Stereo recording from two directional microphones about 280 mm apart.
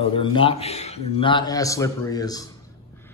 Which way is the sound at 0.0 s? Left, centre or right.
Centre.